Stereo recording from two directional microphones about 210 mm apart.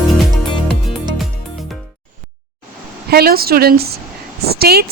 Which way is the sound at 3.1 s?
45° right (ahead or behind).